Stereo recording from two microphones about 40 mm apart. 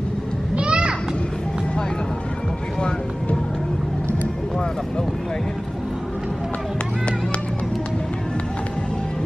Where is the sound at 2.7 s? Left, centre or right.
Left.